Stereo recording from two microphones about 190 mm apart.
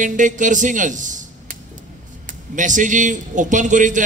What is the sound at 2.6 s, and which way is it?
Speech, 40° right (ahead or behind).